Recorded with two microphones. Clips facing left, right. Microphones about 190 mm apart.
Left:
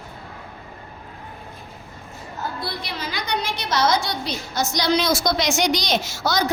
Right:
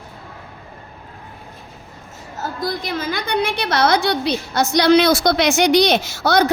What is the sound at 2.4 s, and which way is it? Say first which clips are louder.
A woman's voice: right 5 dB; 45° right (ahead or behind).